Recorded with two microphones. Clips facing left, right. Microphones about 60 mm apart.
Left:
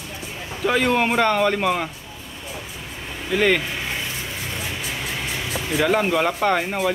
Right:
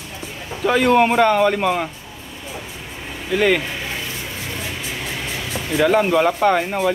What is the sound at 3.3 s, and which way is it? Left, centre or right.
Speech, centre.